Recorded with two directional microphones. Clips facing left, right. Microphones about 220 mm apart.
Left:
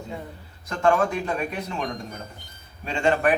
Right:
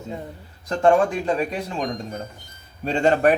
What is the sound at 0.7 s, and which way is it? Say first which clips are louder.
Speech: right 4 dB; 35° right (ahead or behind).